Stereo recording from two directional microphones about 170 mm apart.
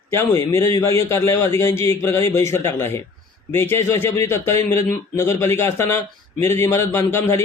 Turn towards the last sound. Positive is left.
turn(degrees=15)  # may be behind; listen again after turning